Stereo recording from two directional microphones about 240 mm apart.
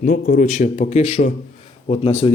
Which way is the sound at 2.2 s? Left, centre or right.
Left.